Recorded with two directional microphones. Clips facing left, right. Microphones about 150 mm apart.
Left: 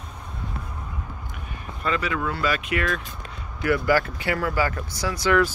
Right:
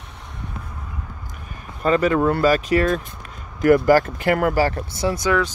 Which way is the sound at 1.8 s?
45° right (ahead or behind).